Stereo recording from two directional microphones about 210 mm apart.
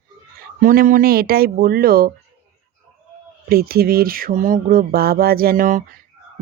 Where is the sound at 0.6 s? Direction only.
40° right (ahead or behind).